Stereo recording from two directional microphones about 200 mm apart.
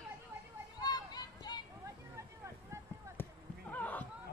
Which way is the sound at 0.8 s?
20° left (ahead or behind).